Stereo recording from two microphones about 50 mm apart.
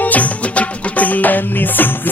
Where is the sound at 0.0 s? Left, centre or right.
Left.